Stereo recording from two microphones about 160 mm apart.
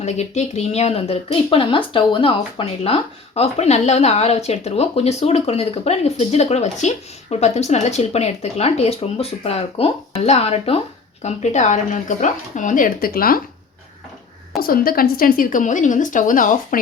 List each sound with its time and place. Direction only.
0.0 s speech: 45° left (ahead or behind); by 13.4 s 65° left (ahead or behind)
14.6 s a woman's voice: 65° left (ahead or behind)